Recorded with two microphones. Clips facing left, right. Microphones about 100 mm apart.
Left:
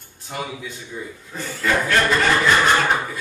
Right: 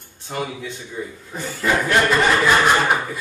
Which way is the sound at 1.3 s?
15° right (ahead or behind).